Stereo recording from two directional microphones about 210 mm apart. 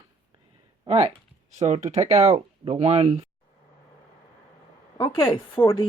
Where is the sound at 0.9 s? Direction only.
30° right (ahead or behind).